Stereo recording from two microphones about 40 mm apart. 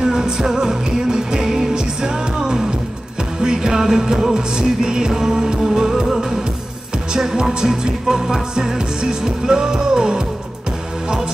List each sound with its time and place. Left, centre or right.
0.0 s music: centre